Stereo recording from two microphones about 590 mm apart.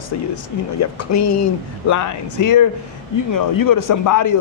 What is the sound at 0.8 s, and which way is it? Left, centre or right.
Speech, left.